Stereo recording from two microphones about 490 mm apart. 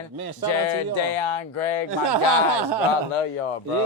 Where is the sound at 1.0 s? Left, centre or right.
Left.